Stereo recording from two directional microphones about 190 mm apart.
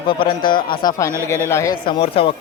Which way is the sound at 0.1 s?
25° left (ahead or behind).